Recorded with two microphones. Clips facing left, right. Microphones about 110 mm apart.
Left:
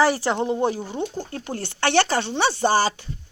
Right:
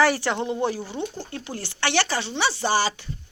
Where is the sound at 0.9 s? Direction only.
45° left (ahead or behind).